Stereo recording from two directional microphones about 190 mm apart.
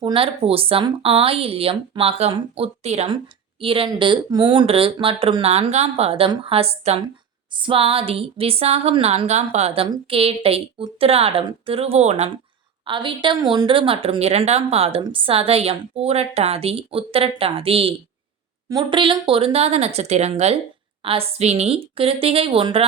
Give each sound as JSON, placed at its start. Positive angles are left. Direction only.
{"t": 0.0, "sound": "speech", "side_deg": -30}